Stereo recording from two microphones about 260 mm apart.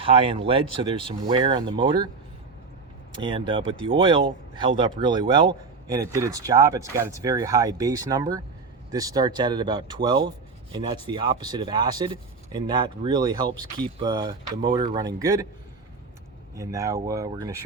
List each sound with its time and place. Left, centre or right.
0.0 s speech: right
3.2 s speech: centre
16.6 s speech: centre